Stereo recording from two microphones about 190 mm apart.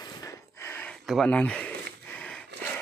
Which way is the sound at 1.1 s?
5° left (ahead or behind).